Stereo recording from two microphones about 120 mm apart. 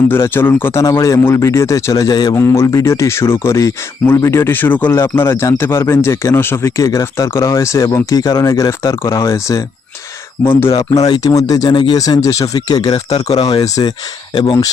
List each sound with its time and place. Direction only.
0.1 s speech: 20° left (ahead or behind); by 2.4 s 35° left (ahead or behind)
2.4 s speech: 20° left (ahead or behind)
10.8 s speech: 30° left (ahead or behind)
12.9 s speech: 60° left (ahead or behind)
13.8 s speech: 35° left (ahead or behind)